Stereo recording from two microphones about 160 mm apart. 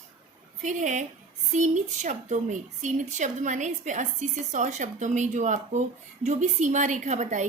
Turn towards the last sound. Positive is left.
turn(degrees=-50)  # may be behind; listen again after turning